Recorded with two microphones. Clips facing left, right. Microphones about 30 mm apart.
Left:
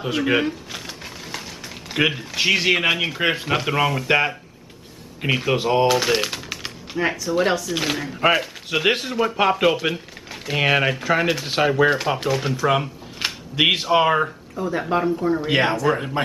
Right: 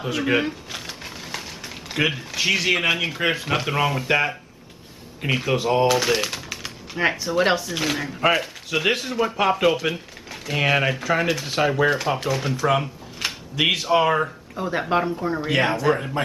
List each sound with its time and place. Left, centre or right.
0.0 s a sound: centre
2.0 s speech: centre
5.2 s speech: centre
5.6 s typewriter: centre
7.0 s speech: centre
7.7 s speech: centre
14.5 s speech: centre
15.4 s speech: centre